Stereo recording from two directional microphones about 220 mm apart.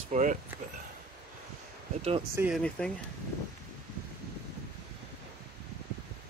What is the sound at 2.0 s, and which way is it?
Speech, 30° right (ahead or behind).